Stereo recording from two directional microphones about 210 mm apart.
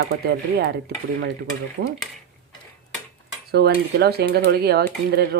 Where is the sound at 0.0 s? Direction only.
45° right (ahead or behind).